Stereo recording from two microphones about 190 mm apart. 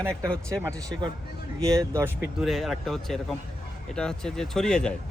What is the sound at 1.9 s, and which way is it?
Speech, 15° right (ahead or behind).